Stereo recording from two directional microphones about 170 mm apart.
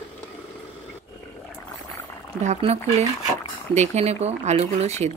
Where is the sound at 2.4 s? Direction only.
40° right (ahead or behind).